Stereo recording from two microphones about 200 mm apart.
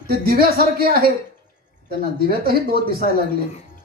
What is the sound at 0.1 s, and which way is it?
Speech, 50° right (ahead or behind).